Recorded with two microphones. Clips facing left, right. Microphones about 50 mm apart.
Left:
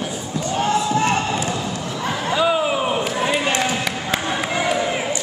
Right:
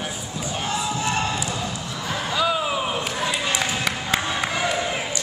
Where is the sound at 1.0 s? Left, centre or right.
Left.